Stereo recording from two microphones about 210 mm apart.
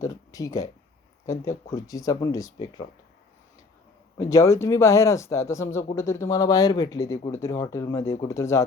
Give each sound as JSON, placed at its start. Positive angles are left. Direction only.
{"t": 0.0, "sound": "speech", "side_deg": 15}
{"t": 4.2, "sound": "speech", "side_deg": 15}